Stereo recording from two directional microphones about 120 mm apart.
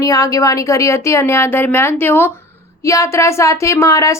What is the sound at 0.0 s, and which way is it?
Speech, 30° left (ahead or behind).